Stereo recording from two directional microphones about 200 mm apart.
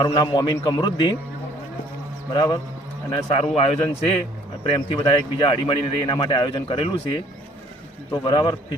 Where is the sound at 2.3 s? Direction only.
20° left (ahead or behind).